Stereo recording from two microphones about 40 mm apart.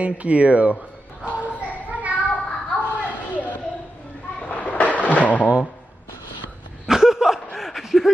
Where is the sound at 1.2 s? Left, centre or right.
Right.